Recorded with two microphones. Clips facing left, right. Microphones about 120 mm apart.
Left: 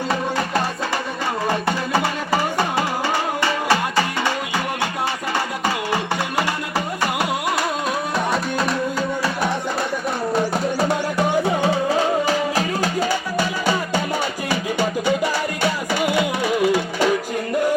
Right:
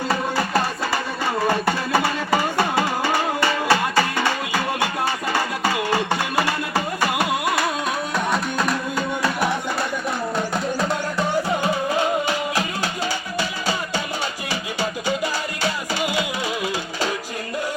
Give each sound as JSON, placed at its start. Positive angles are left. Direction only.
{"t": 0.1, "sound": "music", "side_deg": -5}
{"t": 1.9, "sound": "music", "side_deg": -10}
{"t": 3.7, "sound": "music", "side_deg": 15}
{"t": 8.1, "sound": "music", "side_deg": 0}
{"t": 11.7, "sound": "music", "side_deg": 30}
{"t": 12.5, "sound": "music", "side_deg": 45}